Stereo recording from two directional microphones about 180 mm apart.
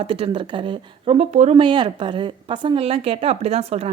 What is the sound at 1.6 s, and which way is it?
A woman's voice, 25° right (ahead or behind).